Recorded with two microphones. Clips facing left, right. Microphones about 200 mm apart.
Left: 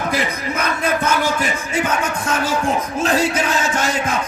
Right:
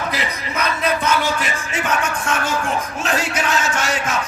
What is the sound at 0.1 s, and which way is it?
Bellow, 50° left (ahead or behind).